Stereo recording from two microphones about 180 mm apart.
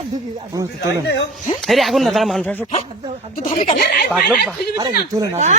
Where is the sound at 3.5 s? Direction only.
50° left (ahead or behind).